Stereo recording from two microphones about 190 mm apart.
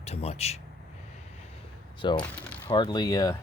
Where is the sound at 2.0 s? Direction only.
25° left (ahead or behind).